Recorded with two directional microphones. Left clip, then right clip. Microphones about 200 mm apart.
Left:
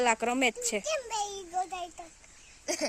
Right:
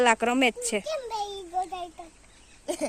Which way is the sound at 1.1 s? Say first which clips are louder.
Right 2 dB; 25° left (ahead or behind).